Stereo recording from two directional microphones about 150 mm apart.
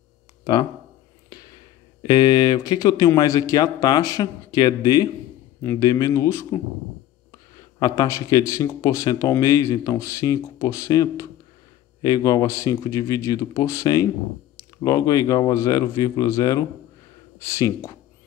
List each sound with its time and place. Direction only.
0.4 s a sound: 30° left (ahead or behind)
2.0 s speech: 30° left (ahead or behind)
7.8 s speech: 25° left (ahead or behind)